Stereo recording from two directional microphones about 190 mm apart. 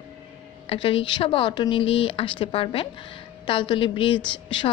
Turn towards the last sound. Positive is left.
turn(degrees=25)  # may be behind; listen again after turning